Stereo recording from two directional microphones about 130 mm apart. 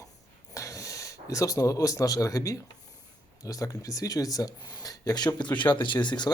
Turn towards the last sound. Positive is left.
turn(degrees=35)  # may be behind; listen again after turning